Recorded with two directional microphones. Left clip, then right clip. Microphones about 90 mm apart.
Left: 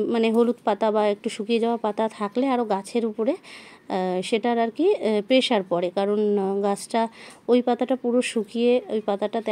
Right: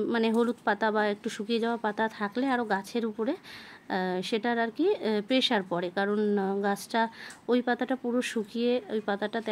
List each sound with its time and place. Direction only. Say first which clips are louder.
0.0 s a woman's voice: left 6 dB; 25° left (ahead or behind)
6.6 s speech: left 4 dB; 35° left (ahead or behind)